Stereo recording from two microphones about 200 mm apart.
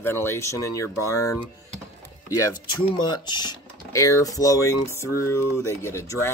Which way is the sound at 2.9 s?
20° left (ahead or behind).